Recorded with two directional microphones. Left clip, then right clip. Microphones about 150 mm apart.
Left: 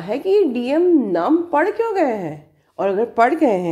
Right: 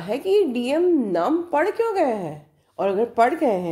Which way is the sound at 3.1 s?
10° left (ahead or behind).